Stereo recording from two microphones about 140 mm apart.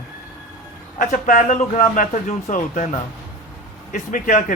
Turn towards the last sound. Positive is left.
turn(degrees=70)  # may be behind; listen again after turning